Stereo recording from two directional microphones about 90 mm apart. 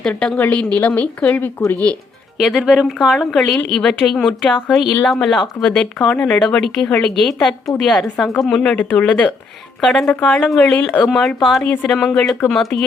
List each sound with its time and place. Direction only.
0.0 s a woman's voice: 10° left (ahead or behind)
0.3 s a woman's voice: 20° left (ahead or behind)
2.4 s a woman's voice: 5° right (ahead or behind)
9.0 s a woman's voice: 15° left (ahead or behind)
9.8 s a woman's voice: 5° left (ahead or behind)
10.1 s a woman's voice: 15° left (ahead or behind)
11.0 s a woman's voice: centre (ahead or behind)